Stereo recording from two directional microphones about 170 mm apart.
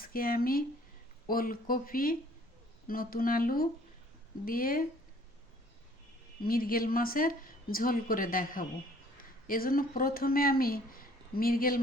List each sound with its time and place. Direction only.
0.0 s speech: 60° left (ahead or behind)
6.4 s speech: 60° left (ahead or behind)